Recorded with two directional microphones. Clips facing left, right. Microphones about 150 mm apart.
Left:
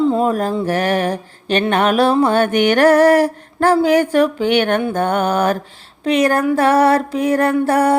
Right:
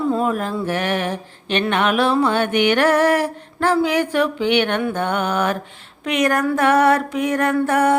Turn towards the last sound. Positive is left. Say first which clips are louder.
# left 2 dB
turn(degrees=35)  # may be behind; listen again after turning